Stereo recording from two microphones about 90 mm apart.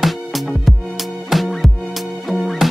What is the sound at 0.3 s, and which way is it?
Music, centre (ahead or behind).